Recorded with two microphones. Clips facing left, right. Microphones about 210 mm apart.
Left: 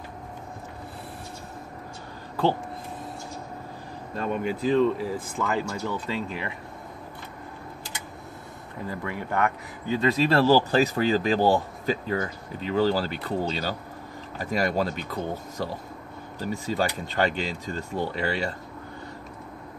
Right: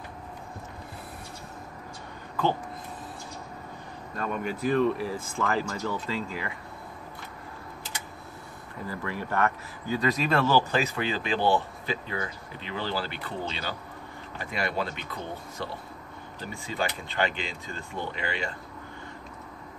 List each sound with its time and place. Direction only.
4.2 s speech: 20° left (ahead or behind)
8.8 s speech: 15° left (ahead or behind); by 18.5 s 40° left (ahead or behind)